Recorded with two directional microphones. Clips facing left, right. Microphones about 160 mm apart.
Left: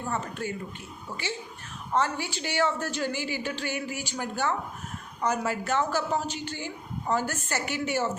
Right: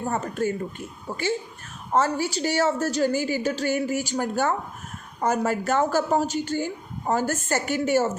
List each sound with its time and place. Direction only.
0.0 s a woman's voice: 45° right (ahead or behind)
1.9 s a woman's voice: 40° right (ahead or behind)